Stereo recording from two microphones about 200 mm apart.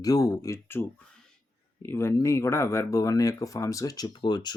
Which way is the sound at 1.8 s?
15° left (ahead or behind).